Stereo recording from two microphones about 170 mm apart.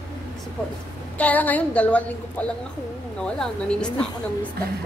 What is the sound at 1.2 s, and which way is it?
Speech, 10° left (ahead or behind).